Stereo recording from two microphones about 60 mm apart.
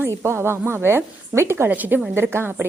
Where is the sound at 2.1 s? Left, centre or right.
Right.